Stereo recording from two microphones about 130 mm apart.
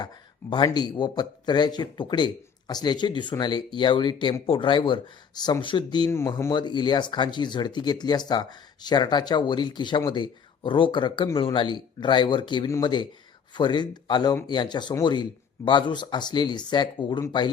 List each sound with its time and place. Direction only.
0.5 s a man's voice: 35° left (ahead or behind)
6.1 s speech: 20° left (ahead or behind)
6.5 s a man's voice: 35° left (ahead or behind)